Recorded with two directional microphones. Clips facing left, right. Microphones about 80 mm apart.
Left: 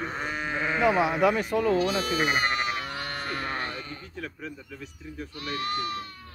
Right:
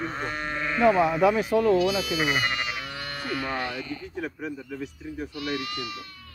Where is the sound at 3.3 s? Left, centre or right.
Left.